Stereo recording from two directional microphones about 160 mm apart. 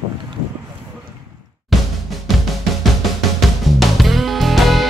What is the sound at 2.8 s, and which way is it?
Music, centre (ahead or behind).